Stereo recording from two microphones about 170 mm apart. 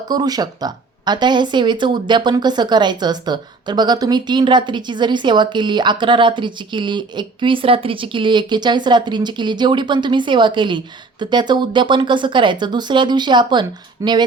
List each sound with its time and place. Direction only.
0.1 s speech: 25° right (ahead or behind)